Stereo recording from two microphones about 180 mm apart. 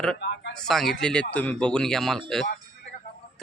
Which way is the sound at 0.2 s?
70° left (ahead or behind).